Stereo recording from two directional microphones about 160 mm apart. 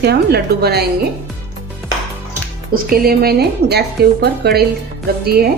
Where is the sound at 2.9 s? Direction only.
70° right (ahead or behind); by 4.6 s 90° right.